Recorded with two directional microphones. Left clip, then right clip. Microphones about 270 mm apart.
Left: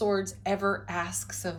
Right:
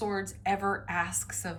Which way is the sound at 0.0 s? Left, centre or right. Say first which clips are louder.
Left 4 dB; centre.